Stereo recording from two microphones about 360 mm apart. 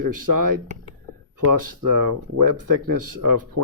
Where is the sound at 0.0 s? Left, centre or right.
Right.